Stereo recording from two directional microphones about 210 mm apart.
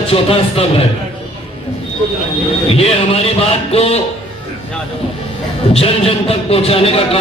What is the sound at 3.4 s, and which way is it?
Speech, 30° left (ahead or behind).